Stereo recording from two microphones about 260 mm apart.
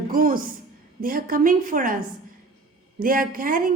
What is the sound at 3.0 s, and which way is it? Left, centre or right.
Speech, right.